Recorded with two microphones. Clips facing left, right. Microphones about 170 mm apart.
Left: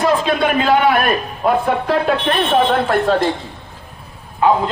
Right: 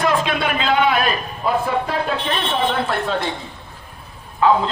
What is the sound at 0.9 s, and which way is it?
A man's voice, 60° left (ahead or behind).